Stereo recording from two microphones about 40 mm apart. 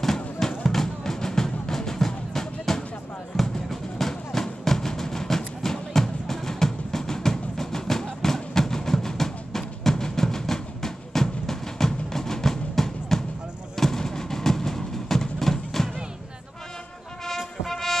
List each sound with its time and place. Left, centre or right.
0.0 s music: centre
4.0 s music: centre
13.7 s a sound: centre
17.6 s music: centre